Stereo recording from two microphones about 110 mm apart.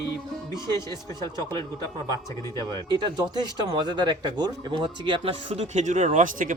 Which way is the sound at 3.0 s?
40° right (ahead or behind).